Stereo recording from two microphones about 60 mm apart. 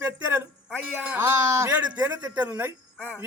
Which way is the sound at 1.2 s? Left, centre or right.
Right.